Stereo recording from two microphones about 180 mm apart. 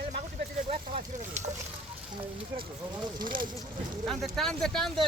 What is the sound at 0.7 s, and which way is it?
Speech, 35° right (ahead or behind).